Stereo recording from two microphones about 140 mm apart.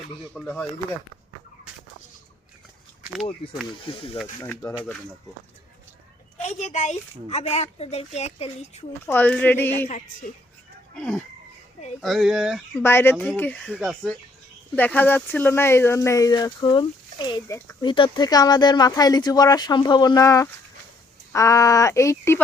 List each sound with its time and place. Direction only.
0.4 s speech: 10° left (ahead or behind)
3.4 s speech: 40° left (ahead or behind)
6.4 s speech: 55° left (ahead or behind)
9.0 s speech: 15° left (ahead or behind)
9.8 s a woman's voice: 60° left (ahead or behind)
10.9 s speech: 5° left (ahead or behind)
12.8 s speech: 15° left (ahead or behind)
13.7 s speech: centre (ahead or behind)
14.8 s speech: 15° left (ahead or behind)